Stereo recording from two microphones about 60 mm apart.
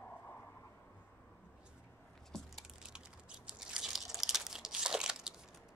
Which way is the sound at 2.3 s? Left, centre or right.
Centre.